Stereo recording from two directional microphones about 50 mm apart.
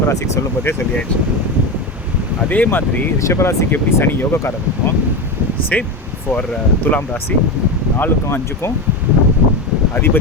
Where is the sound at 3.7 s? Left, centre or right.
Left.